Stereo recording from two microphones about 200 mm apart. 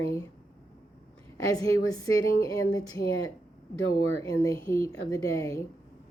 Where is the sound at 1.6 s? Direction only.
15° left (ahead or behind).